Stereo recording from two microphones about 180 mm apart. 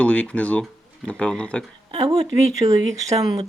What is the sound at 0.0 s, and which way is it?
Speech, 5° left (ahead or behind).